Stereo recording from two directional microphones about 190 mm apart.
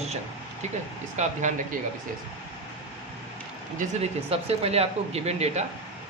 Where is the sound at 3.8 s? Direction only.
35° right (ahead or behind).